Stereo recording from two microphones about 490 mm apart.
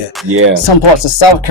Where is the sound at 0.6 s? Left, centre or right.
Left.